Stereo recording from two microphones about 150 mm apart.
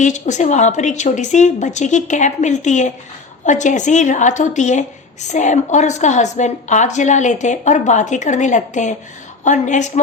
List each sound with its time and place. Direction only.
0.0 s a woman's voice: 55° left (ahead or behind)